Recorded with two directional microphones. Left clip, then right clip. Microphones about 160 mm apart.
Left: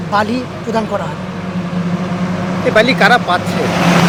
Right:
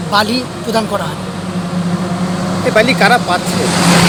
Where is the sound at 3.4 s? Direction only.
40° left (ahead or behind).